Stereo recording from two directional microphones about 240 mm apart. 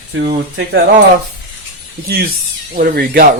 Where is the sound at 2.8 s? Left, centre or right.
Right.